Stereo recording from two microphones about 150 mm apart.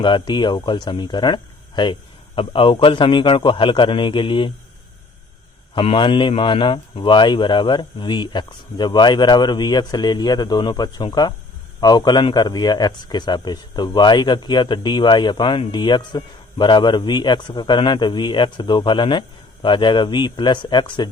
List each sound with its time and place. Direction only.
0.0 s a man's voice: 30° left (ahead or behind)
5.7 s a man's voice: 35° left (ahead or behind)